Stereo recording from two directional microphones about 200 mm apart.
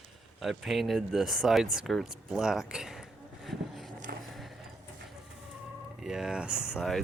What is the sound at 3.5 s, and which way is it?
Vehicle, centre (ahead or behind).